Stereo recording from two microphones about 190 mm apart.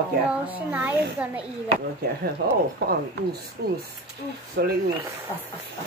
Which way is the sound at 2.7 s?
55° right (ahead or behind).